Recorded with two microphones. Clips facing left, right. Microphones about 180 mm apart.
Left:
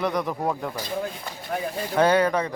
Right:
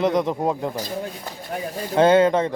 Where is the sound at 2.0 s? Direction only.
25° right (ahead or behind).